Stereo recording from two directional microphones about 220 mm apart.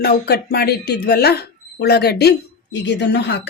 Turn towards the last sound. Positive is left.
turn(degrees=50)  # may be behind; listen again after turning